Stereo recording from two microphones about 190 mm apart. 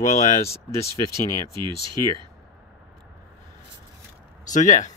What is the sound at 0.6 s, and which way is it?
Speech, 15° left (ahead or behind).